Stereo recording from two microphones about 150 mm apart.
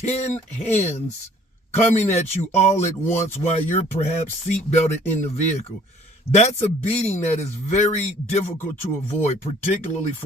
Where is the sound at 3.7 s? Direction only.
45° left (ahead or behind).